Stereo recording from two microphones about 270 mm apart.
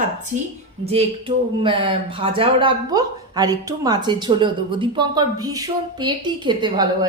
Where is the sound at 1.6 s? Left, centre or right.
Centre.